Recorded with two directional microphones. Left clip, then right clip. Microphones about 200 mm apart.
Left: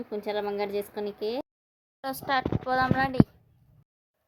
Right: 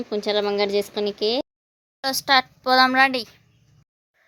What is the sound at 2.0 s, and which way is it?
A woman's voice, 30° right (ahead or behind).